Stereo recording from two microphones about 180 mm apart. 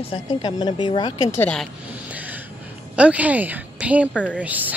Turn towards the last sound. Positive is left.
turn(degrees=-10)  # may be behind; listen again after turning